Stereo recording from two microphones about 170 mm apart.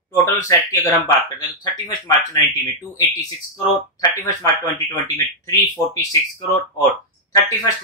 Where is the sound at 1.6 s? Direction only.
20° left (ahead or behind).